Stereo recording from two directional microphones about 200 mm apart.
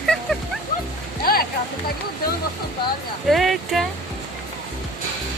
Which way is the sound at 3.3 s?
Centre (ahead or behind).